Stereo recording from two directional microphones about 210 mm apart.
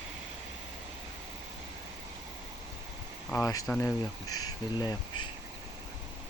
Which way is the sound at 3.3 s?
15° left (ahead or behind).